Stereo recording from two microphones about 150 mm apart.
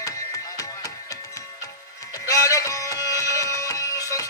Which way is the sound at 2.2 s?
20° left (ahead or behind).